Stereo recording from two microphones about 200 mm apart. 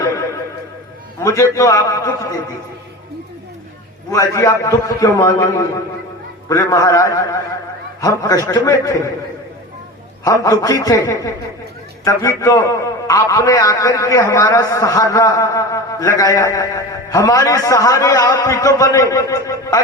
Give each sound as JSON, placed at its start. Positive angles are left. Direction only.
{"t": 1.2, "sound": "a man's voice", "side_deg": 15}
{"t": 4.1, "sound": "a man's voice", "side_deg": 15}
{"t": 10.2, "sound": "a man's voice", "side_deg": 15}